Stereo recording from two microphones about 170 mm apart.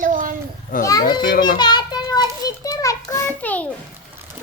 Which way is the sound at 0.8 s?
25° left (ahead or behind).